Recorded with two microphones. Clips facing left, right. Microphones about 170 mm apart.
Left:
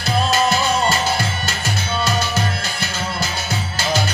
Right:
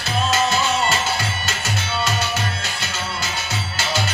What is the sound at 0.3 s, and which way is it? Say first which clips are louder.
Music: left 1 dB; 35° left (ahead or behind).